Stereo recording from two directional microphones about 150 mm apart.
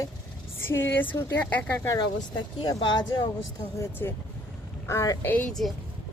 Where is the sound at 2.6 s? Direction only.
25° left (ahead or behind); by 5.7 s 5° left (ahead or behind).